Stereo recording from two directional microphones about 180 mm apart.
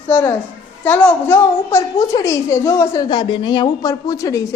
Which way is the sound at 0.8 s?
10° left (ahead or behind).